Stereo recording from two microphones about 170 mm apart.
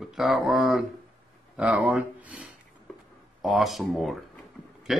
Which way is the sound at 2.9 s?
Centre (ahead or behind).